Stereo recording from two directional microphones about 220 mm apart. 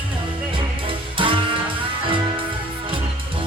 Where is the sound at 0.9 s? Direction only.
25° right (ahead or behind).